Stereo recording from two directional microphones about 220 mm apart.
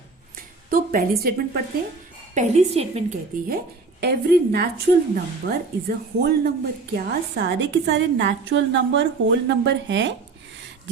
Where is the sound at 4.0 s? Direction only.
45° right (ahead or behind).